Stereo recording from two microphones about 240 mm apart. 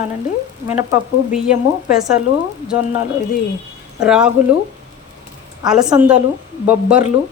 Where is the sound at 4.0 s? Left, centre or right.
Centre.